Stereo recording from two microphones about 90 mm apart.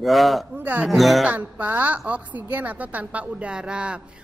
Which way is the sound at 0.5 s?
20° right (ahead or behind).